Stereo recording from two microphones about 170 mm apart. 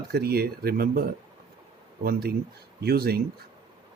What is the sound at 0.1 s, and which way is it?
Speech, 65° right (ahead or behind).